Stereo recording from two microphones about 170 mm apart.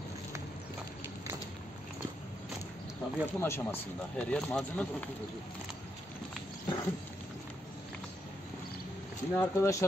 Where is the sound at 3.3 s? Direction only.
15° left (ahead or behind).